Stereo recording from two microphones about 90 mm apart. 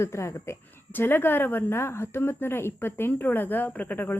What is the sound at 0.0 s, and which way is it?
Speech, 30° left (ahead or behind).